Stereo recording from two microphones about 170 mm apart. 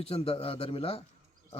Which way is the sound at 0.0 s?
35° left (ahead or behind).